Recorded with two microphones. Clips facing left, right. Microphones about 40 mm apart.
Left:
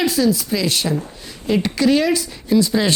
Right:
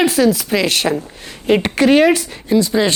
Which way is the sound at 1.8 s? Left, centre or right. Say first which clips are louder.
Right 5 dB; right.